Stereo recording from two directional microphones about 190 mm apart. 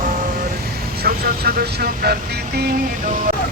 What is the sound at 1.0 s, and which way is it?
Speech, 55° right (ahead or behind).